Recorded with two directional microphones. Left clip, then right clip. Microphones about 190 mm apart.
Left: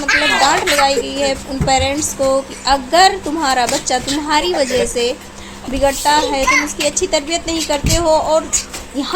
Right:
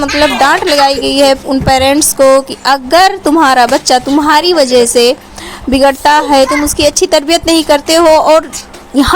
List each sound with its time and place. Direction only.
0.3 s a woman's voice: 55° right (ahead or behind)